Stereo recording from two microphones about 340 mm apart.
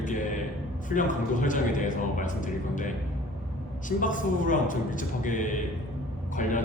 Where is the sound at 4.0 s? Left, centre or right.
Left.